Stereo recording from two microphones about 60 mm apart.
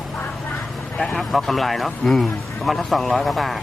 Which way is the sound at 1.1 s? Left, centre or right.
Centre.